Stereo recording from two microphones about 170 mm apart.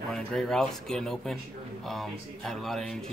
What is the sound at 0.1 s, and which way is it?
Speech, 5° left (ahead or behind).